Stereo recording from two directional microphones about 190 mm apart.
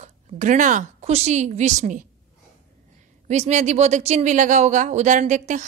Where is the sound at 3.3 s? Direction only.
35° right (ahead or behind).